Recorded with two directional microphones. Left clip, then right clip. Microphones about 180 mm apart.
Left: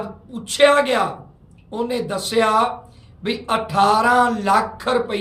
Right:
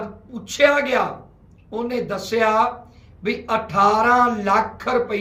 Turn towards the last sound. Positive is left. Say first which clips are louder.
# left 1 dB
turn(degrees=20)  # may be behind; listen again after turning